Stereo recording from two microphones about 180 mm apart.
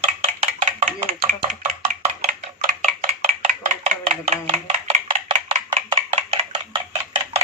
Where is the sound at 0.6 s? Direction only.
40° right (ahead or behind).